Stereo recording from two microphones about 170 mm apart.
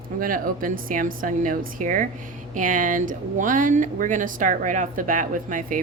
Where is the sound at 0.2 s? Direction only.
55° right (ahead or behind).